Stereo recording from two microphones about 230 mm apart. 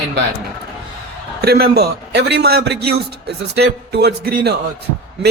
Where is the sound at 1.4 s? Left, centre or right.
Right.